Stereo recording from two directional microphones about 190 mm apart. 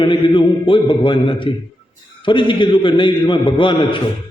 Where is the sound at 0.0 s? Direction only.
25° left (ahead or behind).